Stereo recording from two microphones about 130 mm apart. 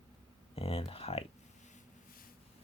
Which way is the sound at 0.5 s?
50° left (ahead or behind).